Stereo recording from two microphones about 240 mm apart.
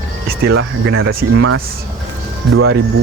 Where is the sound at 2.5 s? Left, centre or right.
Right.